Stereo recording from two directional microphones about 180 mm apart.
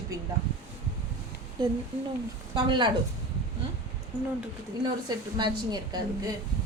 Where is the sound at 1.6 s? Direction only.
25° right (ahead or behind).